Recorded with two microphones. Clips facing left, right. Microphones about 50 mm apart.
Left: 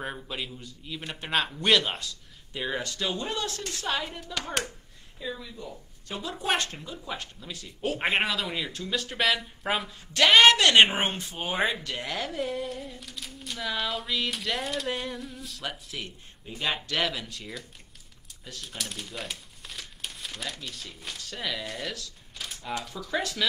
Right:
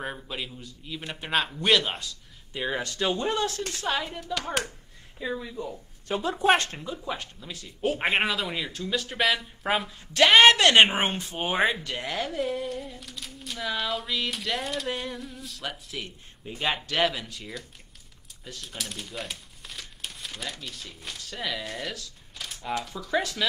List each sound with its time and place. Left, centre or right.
0.0 s speech: centre
2.8 s speech: right
3.8 s speech: centre
5.2 s speech: right
7.0 s speech: centre
10.2 s speech: centre
10.5 s speech: right
11.3 s speech: centre